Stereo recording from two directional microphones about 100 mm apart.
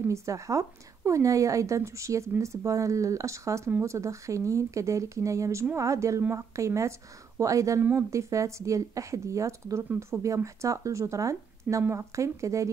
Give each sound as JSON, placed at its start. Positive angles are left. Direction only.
{"t": 0.1, "sound": "speech", "side_deg": -30}